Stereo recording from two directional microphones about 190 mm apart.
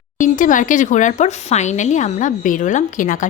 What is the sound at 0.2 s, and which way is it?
A woman's voice, 45° left (ahead or behind).